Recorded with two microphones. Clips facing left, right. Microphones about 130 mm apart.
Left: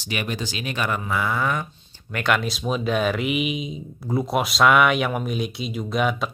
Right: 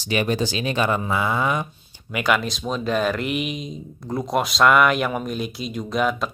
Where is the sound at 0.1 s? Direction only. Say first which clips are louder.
Right 6 dB; 35° right (ahead or behind).